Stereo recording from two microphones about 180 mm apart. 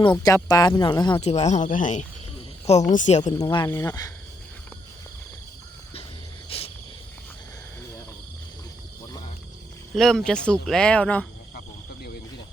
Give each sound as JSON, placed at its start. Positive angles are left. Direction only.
{"t": 0.2, "sound": "speech", "side_deg": 20}
{"t": 1.2, "sound": "speech", "side_deg": 35}
{"t": 3.3, "sound": "speech", "side_deg": 25}
{"t": 6.5, "sound": "cricket", "side_deg": 30}
{"t": 9.9, "sound": "speech", "side_deg": 0}